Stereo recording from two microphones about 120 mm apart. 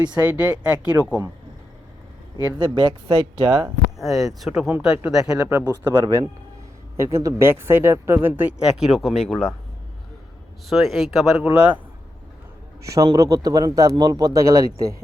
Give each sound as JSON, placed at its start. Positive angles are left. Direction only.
{"t": 0.2, "sound": "speech", "side_deg": -10}
{"t": 2.6, "sound": "speech", "side_deg": -40}
{"t": 3.9, "sound": "speech", "side_deg": 0}
{"t": 5.5, "sound": "speech", "side_deg": -25}
{"t": 8.8, "sound": "speech", "side_deg": 0}
{"t": 10.7, "sound": "speech", "side_deg": 0}
{"t": 11.4, "sound": "speech", "side_deg": -15}
{"t": 12.9, "sound": "speech", "side_deg": -30}